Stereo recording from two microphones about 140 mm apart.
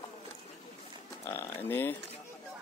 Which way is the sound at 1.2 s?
15° left (ahead or behind).